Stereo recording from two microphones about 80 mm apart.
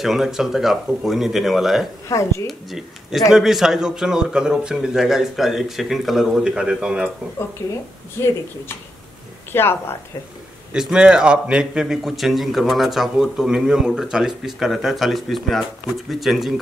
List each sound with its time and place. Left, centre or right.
0.0 s a man's voice: centre
2.0 s speech: left
2.4 s a man's voice: centre
7.6 s speech: left
9.5 s speech: left
10.7 s a man's voice: centre